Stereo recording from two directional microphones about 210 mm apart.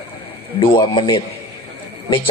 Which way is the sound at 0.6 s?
25° left (ahead or behind).